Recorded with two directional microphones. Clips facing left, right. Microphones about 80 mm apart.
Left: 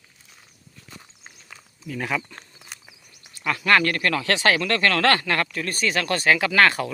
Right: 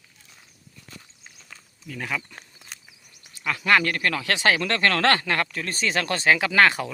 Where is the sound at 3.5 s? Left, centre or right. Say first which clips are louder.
Left 1 dB; centre.